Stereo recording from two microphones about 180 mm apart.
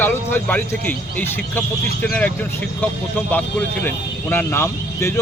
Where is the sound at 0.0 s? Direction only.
10° left (ahead or behind).